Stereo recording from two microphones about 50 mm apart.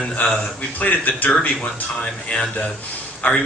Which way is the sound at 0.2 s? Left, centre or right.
Left.